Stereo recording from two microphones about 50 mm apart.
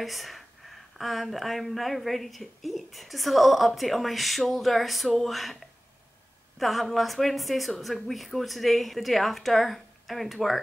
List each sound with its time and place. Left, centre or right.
0.0 s speech: centre
6.6 s speech: centre